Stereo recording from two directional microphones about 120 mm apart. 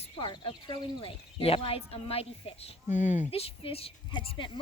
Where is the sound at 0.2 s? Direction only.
45° left (ahead or behind).